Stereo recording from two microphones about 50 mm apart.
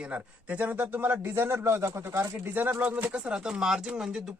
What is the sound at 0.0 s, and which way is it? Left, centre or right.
A man's voice, right.